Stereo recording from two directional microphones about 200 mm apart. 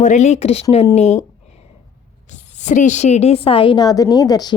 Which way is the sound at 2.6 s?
35° left (ahead or behind).